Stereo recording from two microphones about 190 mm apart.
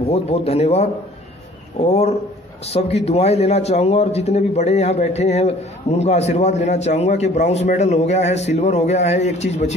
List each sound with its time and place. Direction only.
0.1 s speech: 35° left (ahead or behind)